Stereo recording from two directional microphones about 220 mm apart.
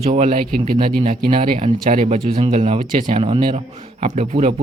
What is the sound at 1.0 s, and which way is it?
Speech, 25° right (ahead or behind).